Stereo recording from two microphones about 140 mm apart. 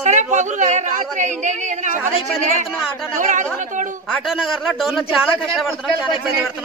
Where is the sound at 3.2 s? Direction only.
65° right (ahead or behind).